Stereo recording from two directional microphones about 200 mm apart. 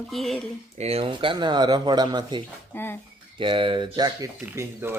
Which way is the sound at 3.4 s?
25° right (ahead or behind).